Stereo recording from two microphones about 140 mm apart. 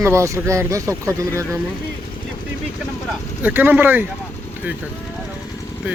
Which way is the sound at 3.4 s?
15° right (ahead or behind).